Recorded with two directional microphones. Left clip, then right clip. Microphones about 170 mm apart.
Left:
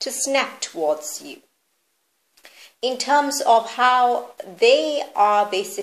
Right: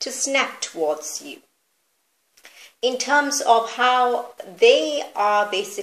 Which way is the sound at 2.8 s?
30° left (ahead or behind).